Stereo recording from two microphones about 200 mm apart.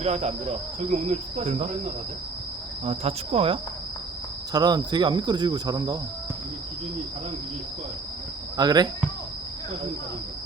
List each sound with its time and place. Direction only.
0.0 s cricket: 35° right (ahead or behind)
2.8 s cricket: 30° right (ahead or behind)
4.5 s speech: 20° right (ahead or behind)
8.5 s speech: 20° right (ahead or behind)